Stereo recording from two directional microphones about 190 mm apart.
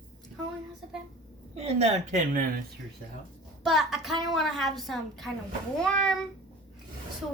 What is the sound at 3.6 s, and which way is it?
A woman's voice, centre (ahead or behind).